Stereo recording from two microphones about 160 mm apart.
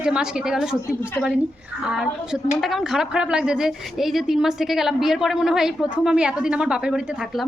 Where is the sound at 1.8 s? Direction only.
5° right (ahead or behind).